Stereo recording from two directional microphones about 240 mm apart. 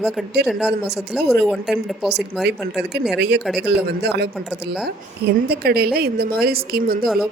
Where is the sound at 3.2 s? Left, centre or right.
Right.